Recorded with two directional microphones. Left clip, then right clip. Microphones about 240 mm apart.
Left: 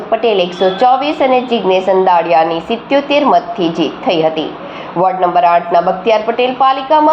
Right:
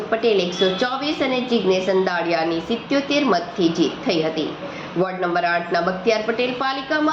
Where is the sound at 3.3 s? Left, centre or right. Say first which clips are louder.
Left 8 dB; left.